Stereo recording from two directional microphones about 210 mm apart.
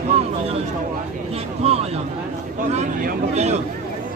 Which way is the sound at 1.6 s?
30° right (ahead or behind).